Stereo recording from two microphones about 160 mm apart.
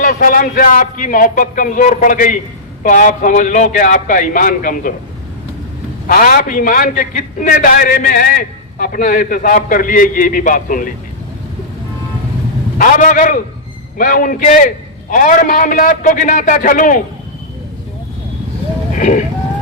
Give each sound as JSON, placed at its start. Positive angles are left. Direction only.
{"t": 0.0, "sound": "a man's voice", "side_deg": 60}
{"t": 6.1, "sound": "a man's voice", "side_deg": 65}
{"t": 12.8, "sound": "a man's voice", "side_deg": 55}
{"t": 18.9, "sound": "sheep", "side_deg": 50}